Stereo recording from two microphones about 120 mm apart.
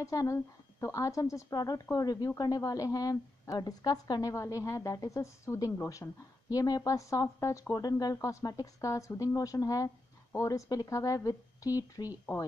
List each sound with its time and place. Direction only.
0.0 s a woman's voice: 25° left (ahead or behind)